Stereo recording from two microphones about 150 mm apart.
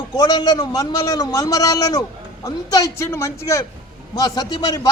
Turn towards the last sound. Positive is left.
turn(degrees=25)  # may be behind; listen again after turning